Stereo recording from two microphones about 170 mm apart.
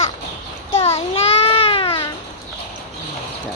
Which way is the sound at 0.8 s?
35° left (ahead or behind).